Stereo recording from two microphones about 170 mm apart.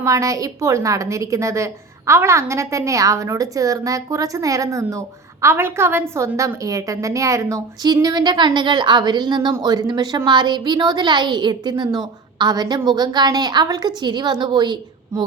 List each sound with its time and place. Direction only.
0.0 s a woman's voice: 20° right (ahead or behind)